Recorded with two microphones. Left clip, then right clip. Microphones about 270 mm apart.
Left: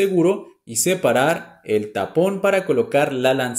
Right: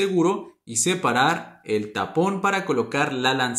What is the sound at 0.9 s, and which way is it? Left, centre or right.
Speech, centre.